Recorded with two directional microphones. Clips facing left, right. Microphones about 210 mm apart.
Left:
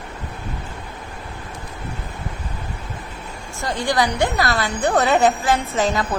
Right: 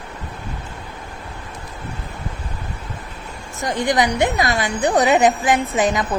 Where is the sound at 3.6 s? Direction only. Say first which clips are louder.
Right 2 dB; 20° right (ahead or behind).